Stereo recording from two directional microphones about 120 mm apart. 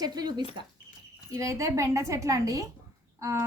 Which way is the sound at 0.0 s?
35° right (ahead or behind).